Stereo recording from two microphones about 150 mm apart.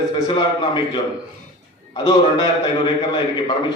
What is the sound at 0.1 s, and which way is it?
Speech, 30° left (ahead or behind).